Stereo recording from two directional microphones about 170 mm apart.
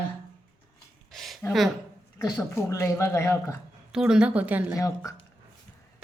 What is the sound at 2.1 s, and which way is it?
Speech, 15° left (ahead or behind).